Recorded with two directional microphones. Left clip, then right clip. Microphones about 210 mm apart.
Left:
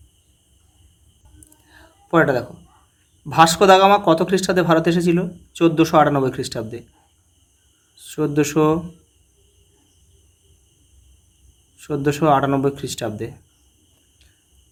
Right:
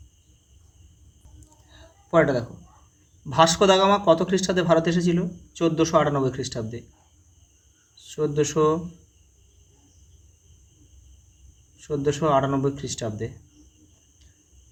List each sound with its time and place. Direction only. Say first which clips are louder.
2.0 s speech: left 3 dB; 25° left (ahead or behind)
8.0 s speech: left 4 dB; 35° left (ahead or behind)
11.8 s speech: left 4 dB; 35° left (ahead or behind)